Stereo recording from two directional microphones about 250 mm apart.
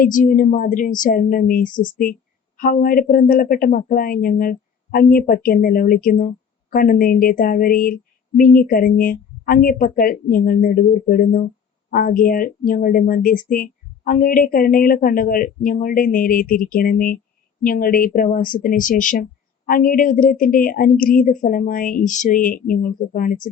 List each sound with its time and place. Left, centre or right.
0.0 s speech: left